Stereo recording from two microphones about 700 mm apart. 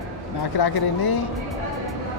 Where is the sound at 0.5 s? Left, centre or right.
Left.